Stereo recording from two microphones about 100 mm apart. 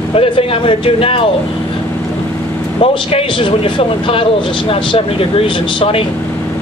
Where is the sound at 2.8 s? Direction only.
70° left (ahead or behind).